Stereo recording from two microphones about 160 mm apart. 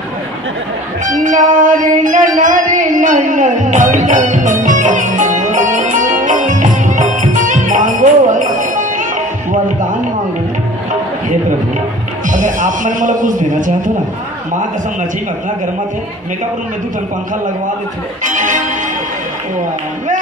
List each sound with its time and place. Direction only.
1.2 s music: 55° right (ahead or behind)
12.3 s a man's voice: 55° right (ahead or behind)
18.2 s speech: 50° right (ahead or behind)